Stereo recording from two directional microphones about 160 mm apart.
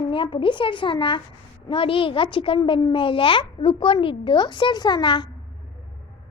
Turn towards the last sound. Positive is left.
turn(degrees=30)  # may be behind; listen again after turning